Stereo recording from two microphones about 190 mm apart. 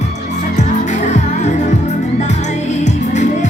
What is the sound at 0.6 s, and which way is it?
Music, 40° left (ahead or behind).